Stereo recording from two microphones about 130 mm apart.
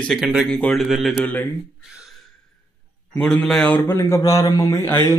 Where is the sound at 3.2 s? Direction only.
5° left (ahead or behind); by 5.0 s 20° left (ahead or behind).